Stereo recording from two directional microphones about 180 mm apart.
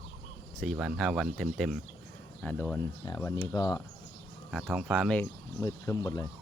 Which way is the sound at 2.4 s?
10° left (ahead or behind).